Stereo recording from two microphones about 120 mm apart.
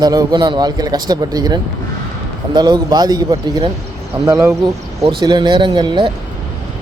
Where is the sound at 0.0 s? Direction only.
35° right (ahead or behind).